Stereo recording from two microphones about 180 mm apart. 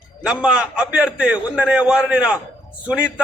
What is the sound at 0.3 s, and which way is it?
A man's voice, 5° right (ahead or behind).